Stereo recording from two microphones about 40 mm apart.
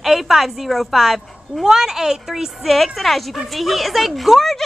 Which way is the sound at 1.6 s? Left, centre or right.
Centre.